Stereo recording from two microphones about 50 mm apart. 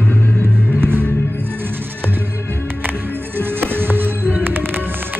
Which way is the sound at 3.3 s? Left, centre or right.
Right.